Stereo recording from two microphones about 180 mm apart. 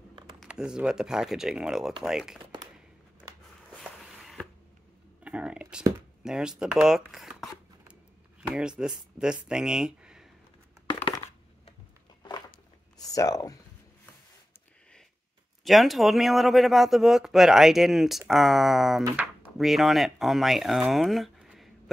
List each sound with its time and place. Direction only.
0.4 s speech: 5° right (ahead or behind)
3.7 s walk: centre (ahead or behind)
5.2 s a sound: 5° right (ahead or behind)
6.2 s speech: 5° right (ahead or behind)
7.9 s a sound: 5° right (ahead or behind)
9.2 s speech: 5° right (ahead or behind)
12.2 s a sound: 20° left (ahead or behind)
13.1 s speech: 20° left (ahead or behind)
15.6 s speech: centre (ahead or behind)